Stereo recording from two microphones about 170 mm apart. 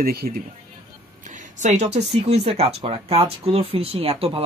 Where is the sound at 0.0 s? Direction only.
65° right (ahead or behind).